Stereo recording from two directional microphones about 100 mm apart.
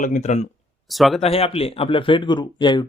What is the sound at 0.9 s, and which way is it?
Speech, centre (ahead or behind).